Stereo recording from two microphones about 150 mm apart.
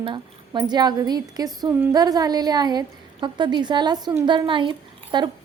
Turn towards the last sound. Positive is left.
turn(degrees=-30)  # may be behind; listen again after turning